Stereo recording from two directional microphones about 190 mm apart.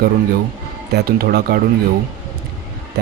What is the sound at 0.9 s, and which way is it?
Speech, 55° right (ahead or behind).